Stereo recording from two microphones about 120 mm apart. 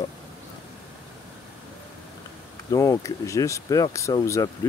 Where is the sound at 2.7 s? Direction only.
30° left (ahead or behind).